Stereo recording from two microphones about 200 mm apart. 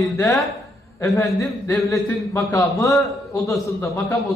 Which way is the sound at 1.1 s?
15° left (ahead or behind).